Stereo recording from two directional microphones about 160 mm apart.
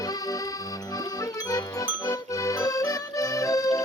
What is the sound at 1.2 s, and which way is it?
Music, 20° left (ahead or behind).